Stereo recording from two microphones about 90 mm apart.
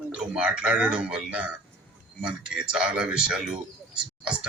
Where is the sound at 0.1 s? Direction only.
10° right (ahead or behind).